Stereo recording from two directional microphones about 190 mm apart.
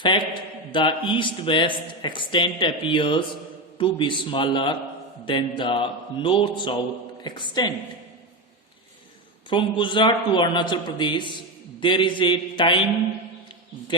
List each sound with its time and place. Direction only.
0.7 s a man's voice: 25° left (ahead or behind)
9.5 s a man's voice: 25° left (ahead or behind)